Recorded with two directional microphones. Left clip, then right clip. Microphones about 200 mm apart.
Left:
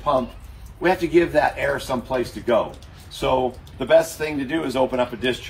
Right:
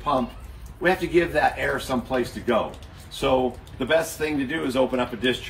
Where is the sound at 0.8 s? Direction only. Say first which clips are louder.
Left 3 dB; 15° left (ahead or behind).